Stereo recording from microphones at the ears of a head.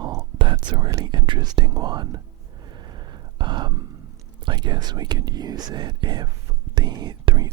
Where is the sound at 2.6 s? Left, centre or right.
Right.